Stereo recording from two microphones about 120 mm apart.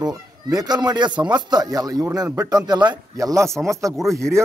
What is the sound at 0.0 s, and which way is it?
A man's voice, 30° right (ahead or behind).